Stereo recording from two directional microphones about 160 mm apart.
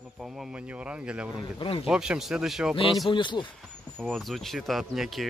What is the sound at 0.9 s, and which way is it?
Speech, 5° right (ahead or behind).